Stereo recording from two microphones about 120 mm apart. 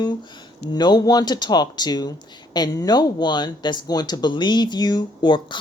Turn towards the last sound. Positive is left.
turn(degrees=40)  # may be behind; listen again after turning